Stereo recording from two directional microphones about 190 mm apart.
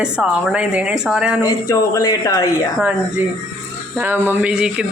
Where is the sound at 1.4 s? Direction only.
20° left (ahead or behind).